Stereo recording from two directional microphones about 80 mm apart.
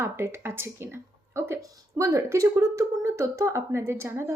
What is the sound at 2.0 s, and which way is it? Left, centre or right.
Speech, right.